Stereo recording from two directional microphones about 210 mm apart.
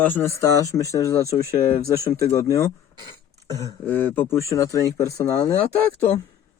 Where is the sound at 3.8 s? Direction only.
10° left (ahead or behind).